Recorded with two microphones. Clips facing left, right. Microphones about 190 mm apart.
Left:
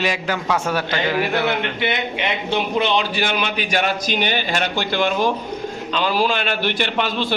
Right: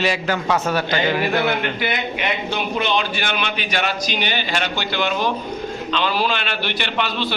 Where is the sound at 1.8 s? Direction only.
25° left (ahead or behind).